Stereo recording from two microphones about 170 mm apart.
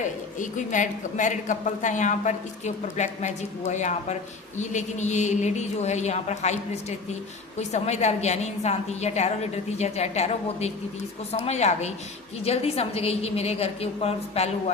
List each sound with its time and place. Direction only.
0.3 s a woman's voice: 45° left (ahead or behind)
7.6 s a woman's voice: 40° left (ahead or behind)